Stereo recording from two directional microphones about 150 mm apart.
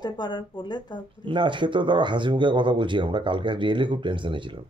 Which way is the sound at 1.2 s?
35° right (ahead or behind).